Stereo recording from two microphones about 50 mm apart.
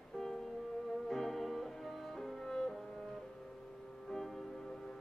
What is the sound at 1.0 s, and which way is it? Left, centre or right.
Music, centre.